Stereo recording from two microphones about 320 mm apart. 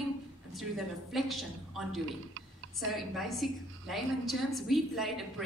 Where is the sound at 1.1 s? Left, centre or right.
Centre.